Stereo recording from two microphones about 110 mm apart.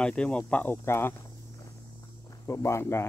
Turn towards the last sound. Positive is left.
turn(degrees=25)  # may be behind; listen again after turning